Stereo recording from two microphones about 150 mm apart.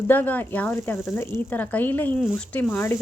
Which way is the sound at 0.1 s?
10° left (ahead or behind).